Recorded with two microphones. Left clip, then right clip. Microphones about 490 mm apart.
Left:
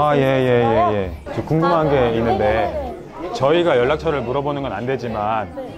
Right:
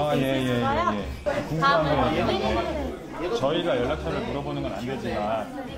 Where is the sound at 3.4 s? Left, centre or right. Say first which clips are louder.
Left 11 dB; left.